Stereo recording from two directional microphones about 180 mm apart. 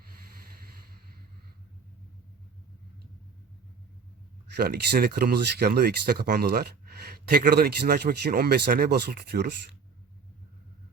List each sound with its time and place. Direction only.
4.4 s speech: 65° right (ahead or behind)